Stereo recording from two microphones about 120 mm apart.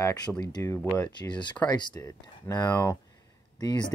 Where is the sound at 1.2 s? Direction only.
40° left (ahead or behind).